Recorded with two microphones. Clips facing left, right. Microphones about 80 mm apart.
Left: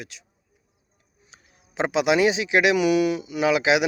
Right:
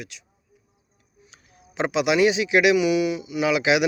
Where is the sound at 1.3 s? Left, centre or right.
Left.